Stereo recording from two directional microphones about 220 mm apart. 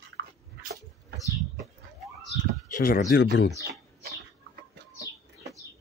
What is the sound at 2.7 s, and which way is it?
Speech, 40° left (ahead or behind).